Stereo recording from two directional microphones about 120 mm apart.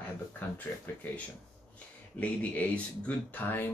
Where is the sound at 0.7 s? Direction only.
15° left (ahead or behind).